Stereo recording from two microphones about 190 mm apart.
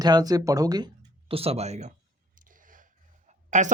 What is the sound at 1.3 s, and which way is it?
Speech, 30° right (ahead or behind).